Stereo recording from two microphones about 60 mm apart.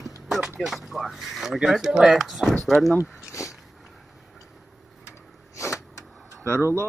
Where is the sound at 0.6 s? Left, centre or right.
Centre.